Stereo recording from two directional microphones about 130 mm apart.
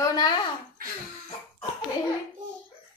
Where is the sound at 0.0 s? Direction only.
30° left (ahead or behind).